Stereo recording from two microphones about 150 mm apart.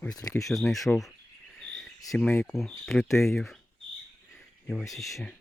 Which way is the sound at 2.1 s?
5° left (ahead or behind).